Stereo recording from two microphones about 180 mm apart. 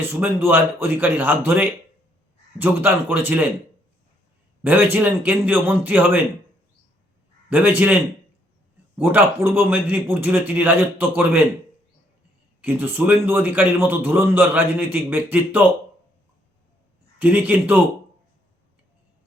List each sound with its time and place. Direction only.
0.0 s a man's voice: 10° right (ahead or behind)
4.6 s a man's voice: 10° right (ahead or behind)
7.5 s a man's voice: 10° right (ahead or behind)
9.0 s a man's voice: 10° right (ahead or behind)
12.6 s a man's voice: 10° right (ahead or behind)
17.2 s a man's voice: 10° right (ahead or behind)